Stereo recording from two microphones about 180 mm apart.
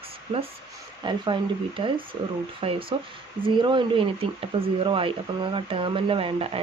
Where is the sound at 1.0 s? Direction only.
25° right (ahead or behind).